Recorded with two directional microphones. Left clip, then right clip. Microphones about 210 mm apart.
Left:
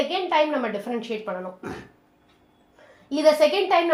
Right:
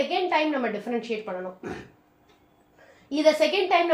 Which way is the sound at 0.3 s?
30° left (ahead or behind).